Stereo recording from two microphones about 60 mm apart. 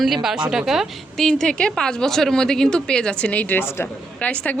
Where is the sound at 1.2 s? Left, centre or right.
Centre; by 3.6 s left.